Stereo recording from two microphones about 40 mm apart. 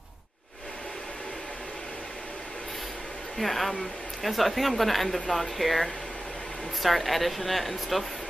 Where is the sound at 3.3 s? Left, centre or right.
Centre.